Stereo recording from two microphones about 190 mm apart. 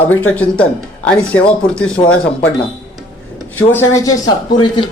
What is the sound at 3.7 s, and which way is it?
Speech, 15° left (ahead or behind).